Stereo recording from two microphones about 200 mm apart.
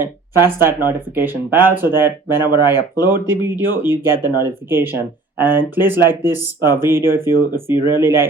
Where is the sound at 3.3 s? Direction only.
10° right (ahead or behind).